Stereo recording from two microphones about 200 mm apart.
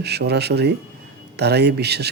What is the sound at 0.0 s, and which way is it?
Speech, 55° right (ahead or behind).